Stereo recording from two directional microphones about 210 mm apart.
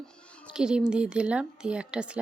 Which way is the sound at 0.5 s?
5° right (ahead or behind).